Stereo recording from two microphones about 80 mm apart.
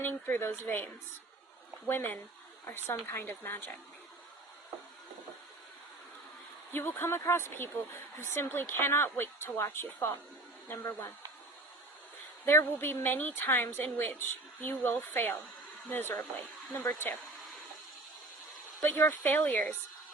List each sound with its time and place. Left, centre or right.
0.0 s a woman's voice: left
1.9 s a woman's voice: left
6.7 s a woman's voice: left
12.5 s a woman's voice: left
18.8 s a woman's voice: left